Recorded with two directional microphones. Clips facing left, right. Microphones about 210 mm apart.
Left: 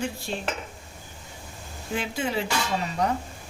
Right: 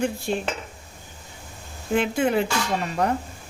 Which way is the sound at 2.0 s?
55° right (ahead or behind).